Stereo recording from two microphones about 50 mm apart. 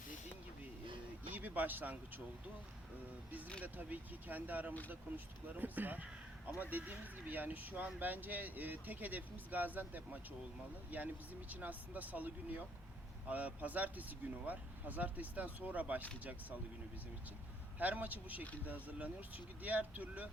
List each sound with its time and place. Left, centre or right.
1.3 s speech: right
3.6 s speech: right
17.7 s speech: right